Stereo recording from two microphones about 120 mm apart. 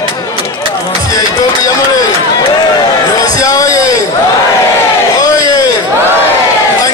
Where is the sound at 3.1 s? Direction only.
30° left (ahead or behind).